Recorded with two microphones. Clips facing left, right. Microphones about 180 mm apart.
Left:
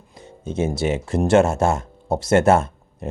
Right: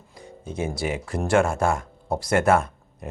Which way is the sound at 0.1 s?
25° left (ahead or behind).